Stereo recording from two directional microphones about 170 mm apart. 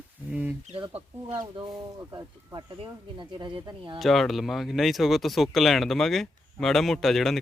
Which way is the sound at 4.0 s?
Centre (ahead or behind).